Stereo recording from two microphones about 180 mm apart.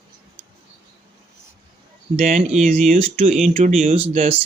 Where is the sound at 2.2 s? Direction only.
40° right (ahead or behind).